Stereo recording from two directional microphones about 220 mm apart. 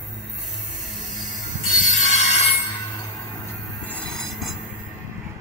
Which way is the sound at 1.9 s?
30° left (ahead or behind).